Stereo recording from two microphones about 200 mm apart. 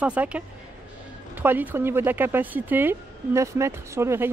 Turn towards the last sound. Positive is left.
turn(degrees=-15)  # may be behind; listen again after turning